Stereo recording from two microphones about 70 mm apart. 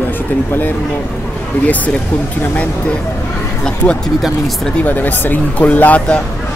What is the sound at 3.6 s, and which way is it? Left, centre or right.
Speech, centre.